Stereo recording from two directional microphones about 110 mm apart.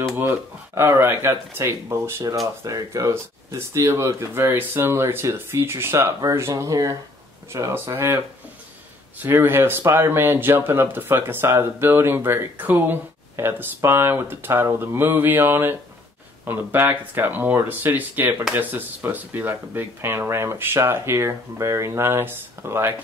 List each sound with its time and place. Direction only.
0.0 s speech: 20° right (ahead or behind)
9.2 s speech: 20° right (ahead or behind)